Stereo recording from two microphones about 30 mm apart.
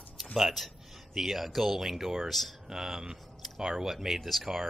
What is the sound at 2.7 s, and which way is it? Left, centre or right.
Speech, centre.